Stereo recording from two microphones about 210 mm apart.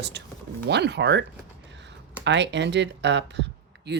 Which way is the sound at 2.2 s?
55° right (ahead or behind).